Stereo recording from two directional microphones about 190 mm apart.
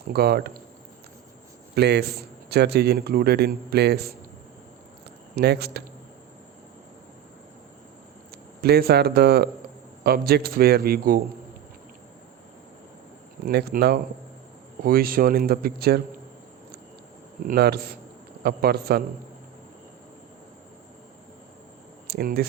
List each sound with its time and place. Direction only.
0.1 s a man's voice: 55° right (ahead or behind)
1.7 s a man's voice: 60° right (ahead or behind)
5.3 s a man's voice: 60° right (ahead or behind)
8.6 s a man's voice: 55° right (ahead or behind)
13.4 s a man's voice: 55° right (ahead or behind)
17.5 s a man's voice: 55° right (ahead or behind)
22.0 s a sound: 50° right (ahead or behind)